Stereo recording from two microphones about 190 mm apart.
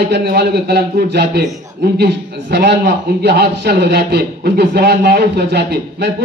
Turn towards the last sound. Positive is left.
turn(degrees=-60)  # may be behind; listen again after turning